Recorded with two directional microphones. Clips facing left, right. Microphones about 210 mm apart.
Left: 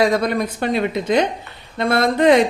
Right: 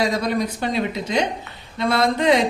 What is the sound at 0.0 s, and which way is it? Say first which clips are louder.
Speech: left 4 dB; 55° left (ahead or behind).